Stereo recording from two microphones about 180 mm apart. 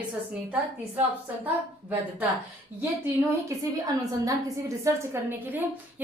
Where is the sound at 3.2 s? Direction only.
20° right (ahead or behind).